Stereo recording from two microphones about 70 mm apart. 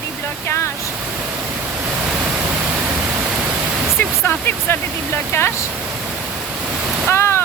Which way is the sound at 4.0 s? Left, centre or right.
Left.